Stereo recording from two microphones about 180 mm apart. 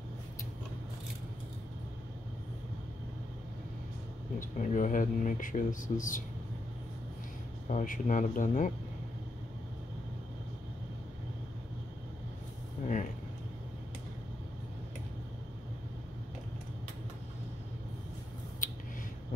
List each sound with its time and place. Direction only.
4.4 s speech: 45° left (ahead or behind)
7.7 s speech: 45° left (ahead or behind)
18.6 s a sound: 50° left (ahead or behind)